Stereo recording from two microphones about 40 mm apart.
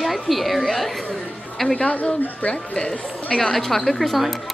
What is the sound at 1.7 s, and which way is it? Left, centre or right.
A woman's voice, left.